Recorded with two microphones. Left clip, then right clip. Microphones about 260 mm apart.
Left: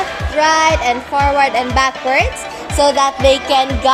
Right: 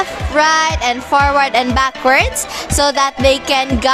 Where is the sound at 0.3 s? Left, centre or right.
Right.